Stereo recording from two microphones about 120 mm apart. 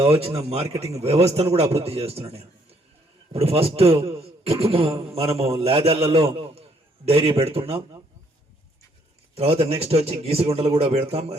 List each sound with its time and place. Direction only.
0.0 s a man's voice: 55° right (ahead or behind)
9.3 s a man's voice: 55° right (ahead or behind)